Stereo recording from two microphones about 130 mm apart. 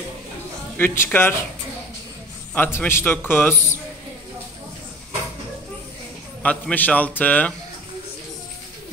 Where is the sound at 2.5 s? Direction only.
15° left (ahead or behind).